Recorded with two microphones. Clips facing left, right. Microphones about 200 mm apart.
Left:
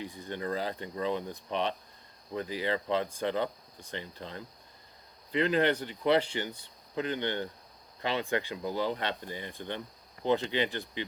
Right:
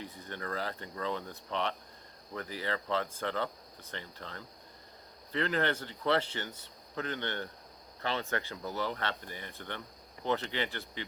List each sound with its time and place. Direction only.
0.0 s speech: 15° left (ahead or behind)